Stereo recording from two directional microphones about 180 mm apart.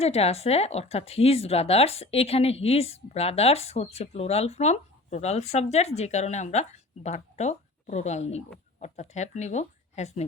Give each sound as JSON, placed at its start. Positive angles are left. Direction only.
{"t": 0.0, "sound": "a woman's voice", "side_deg": 35}